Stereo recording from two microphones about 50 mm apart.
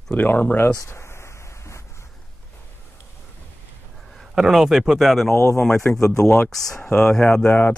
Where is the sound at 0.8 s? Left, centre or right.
Left.